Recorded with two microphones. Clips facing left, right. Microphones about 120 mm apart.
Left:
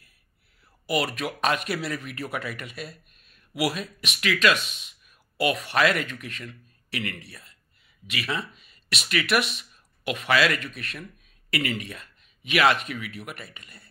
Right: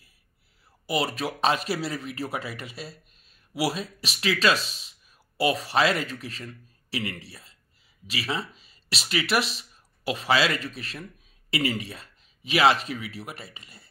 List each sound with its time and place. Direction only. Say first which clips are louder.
0.8 s speech: even; 25° right (ahead or behind)